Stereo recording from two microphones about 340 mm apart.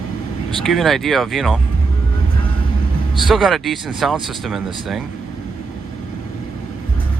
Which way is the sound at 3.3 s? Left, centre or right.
Centre.